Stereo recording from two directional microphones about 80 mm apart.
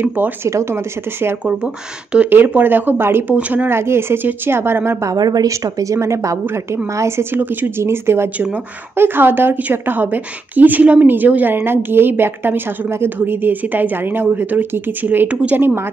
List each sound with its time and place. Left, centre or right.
0.0 s a woman's voice: right
0.5 s a woman's voice: right
3.3 s a woman's voice: centre
5.1 s a woman's voice: right